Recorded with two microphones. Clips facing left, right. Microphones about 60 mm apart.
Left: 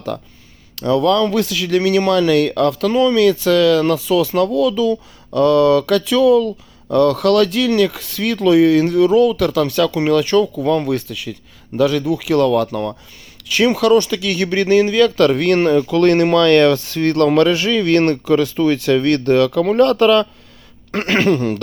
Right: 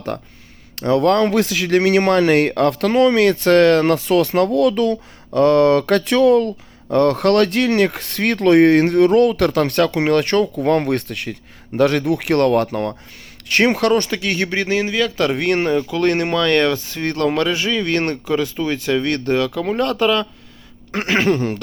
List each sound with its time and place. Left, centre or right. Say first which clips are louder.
0.9 s speech: even; right
9.3 s speech: even; right
10.7 s speech: even; right
11.9 s speech: even; right
13.5 s speech: left 2 dB; right; by 19.5 s centre
19.5 s speech: left 6 dB; centre
21.2 s a sound: left 2 dB; right